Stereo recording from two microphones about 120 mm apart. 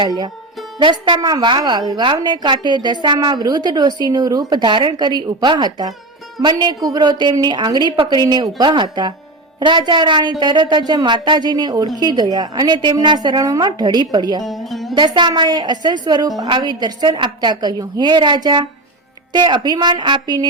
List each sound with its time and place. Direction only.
0.8 s a woman's voice: 40° right (ahead or behind)
14.4 s speech: centre (ahead or behind)
14.9 s a woman's voice: 40° right (ahead or behind)